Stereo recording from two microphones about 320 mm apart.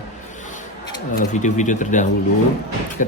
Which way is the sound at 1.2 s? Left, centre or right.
Left.